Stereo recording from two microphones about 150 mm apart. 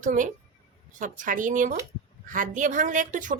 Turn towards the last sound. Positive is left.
turn(degrees=-60)  # may be behind; listen again after turning